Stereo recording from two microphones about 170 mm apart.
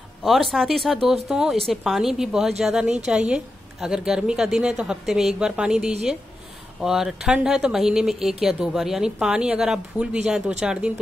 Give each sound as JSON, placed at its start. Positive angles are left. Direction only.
{"t": 0.2, "sound": "speech", "side_deg": 0}